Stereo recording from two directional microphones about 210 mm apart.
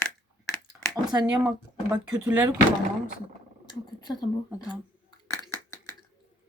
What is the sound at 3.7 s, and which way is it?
Speech, 20° left (ahead or behind).